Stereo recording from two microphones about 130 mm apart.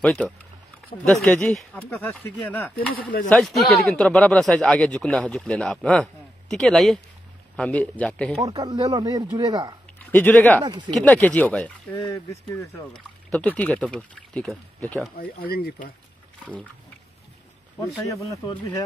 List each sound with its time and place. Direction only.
0.0 s speech: 10° left (ahead or behind)
3.3 s speech: centre (ahead or behind)
8.5 s speech: 30° right (ahead or behind)
10.1 s speech: 15° left (ahead or behind)